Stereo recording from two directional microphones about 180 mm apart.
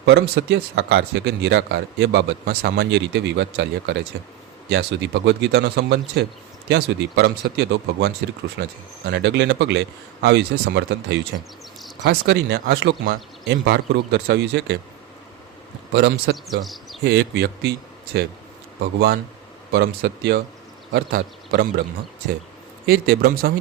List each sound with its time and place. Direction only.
0.0 s speech: 75° right (ahead or behind)
15.9 s speech: 75° right (ahead or behind)
16.5 s speech: centre (ahead or behind)
17.0 s a man's voice: 60° right (ahead or behind)
22.9 s speech: 60° right (ahead or behind)